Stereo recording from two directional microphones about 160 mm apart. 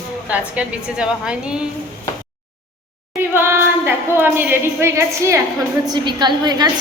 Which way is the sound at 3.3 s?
15° right (ahead or behind).